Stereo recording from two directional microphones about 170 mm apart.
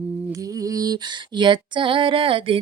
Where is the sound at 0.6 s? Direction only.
20° right (ahead or behind).